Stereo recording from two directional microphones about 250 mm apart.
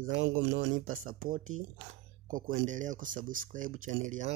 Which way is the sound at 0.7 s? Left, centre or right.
Right.